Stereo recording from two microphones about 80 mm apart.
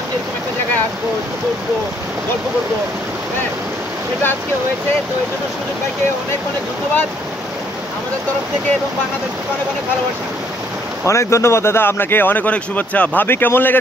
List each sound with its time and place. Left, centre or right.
11.1 s speech: left